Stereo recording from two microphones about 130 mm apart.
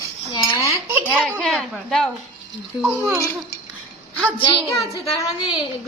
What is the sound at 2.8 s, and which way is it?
Speech, 10° right (ahead or behind).